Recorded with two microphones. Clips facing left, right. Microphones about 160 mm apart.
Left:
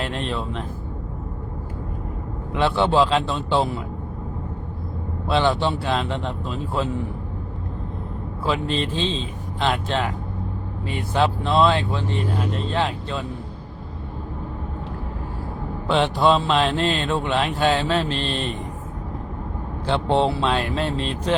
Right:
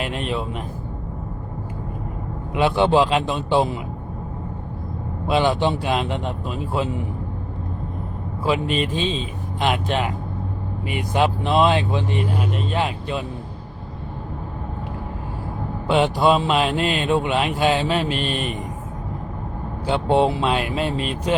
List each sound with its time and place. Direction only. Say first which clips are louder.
0.0 s speech: right 1 dB; 10° right (ahead or behind)
2.5 s speech: right 2 dB; 15° right (ahead or behind)
5.3 s speech: right 1 dB; 15° right (ahead or behind)
8.4 s speech: right 2 dB; 10° right (ahead or behind)
15.9 s speech: right 1 dB; 10° right (ahead or behind)
19.9 s speech: right 2 dB; 10° right (ahead or behind)